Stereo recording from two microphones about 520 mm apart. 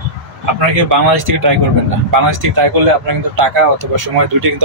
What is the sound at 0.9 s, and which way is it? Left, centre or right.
Speech, right.